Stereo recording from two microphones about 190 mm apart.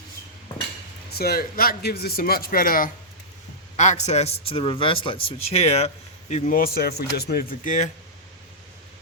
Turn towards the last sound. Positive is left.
turn(degrees=40)  # may be behind; listen again after turning